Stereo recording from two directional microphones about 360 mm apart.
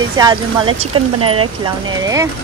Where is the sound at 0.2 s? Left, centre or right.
Centre.